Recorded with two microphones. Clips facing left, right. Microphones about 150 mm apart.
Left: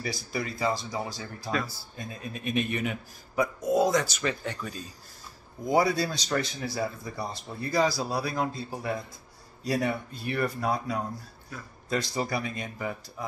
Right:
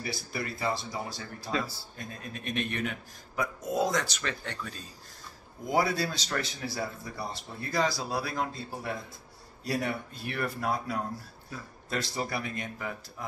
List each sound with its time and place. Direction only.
0.0 s speech: centre (ahead or behind)
1.5 s speech: 25° right (ahead or behind)
2.0 s speech: 5° left (ahead or behind)